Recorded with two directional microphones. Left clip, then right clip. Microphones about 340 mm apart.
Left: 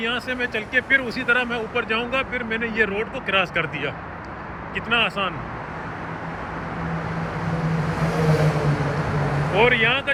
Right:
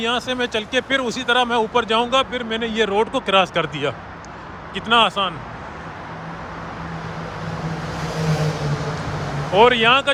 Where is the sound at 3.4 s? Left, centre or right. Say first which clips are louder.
Right 3 dB; centre.